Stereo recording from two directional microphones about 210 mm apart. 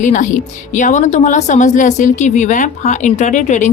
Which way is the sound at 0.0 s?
35° left (ahead or behind).